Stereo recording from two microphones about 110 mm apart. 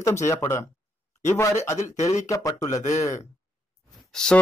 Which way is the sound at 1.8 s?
90° left.